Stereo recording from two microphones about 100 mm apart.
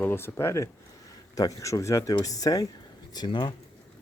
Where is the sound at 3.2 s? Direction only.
50° left (ahead or behind).